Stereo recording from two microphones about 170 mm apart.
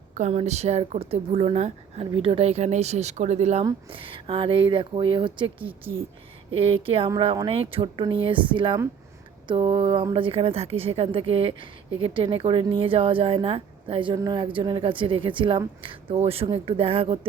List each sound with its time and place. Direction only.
0.1 s a woman's voice: 45° right (ahead or behind)